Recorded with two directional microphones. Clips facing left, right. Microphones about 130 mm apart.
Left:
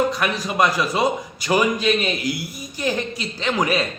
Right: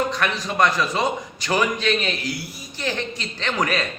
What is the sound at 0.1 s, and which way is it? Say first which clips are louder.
A man's voice: left 1 dB; 10° left (ahead or behind).